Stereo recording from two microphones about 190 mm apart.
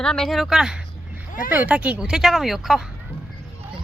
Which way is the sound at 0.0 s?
5° left (ahead or behind).